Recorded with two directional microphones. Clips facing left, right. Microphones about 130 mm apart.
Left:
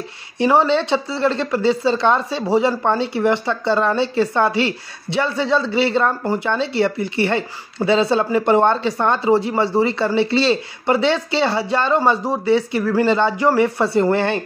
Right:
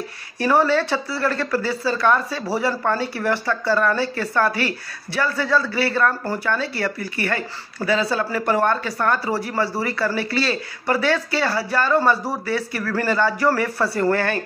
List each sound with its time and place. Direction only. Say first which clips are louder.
0.4 s speech: left 2 dB; 20° left (ahead or behind)